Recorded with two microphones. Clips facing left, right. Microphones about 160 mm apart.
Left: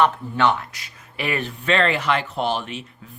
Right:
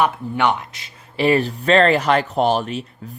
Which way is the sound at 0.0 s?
15° right (ahead or behind).